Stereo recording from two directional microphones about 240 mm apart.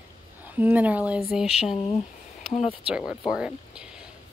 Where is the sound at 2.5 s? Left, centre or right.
Left.